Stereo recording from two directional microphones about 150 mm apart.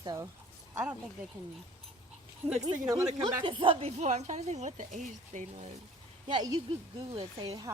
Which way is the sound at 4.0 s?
50° right (ahead or behind).